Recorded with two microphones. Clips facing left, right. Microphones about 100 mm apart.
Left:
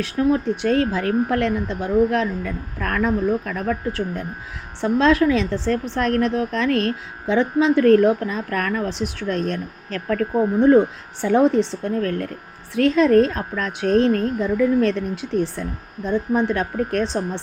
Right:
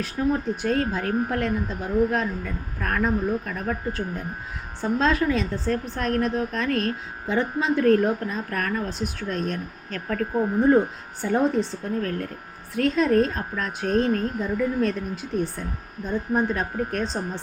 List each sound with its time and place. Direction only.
0.0 s a woman's voice: 80° left
11.2 s a woman's voice: 90° left; by 17.4 s 75° left (ahead or behind)